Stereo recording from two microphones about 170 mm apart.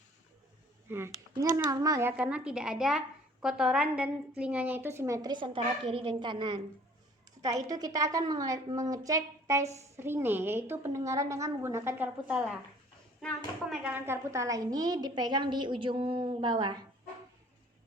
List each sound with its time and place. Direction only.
0.9 s a woman's voice: 15° right (ahead or behind)
9.6 s a woman's voice: 40° right (ahead or behind)
10.0 s a woman's voice: 15° right (ahead or behind)
13.9 s a woman's voice: 15° right (ahead or behind)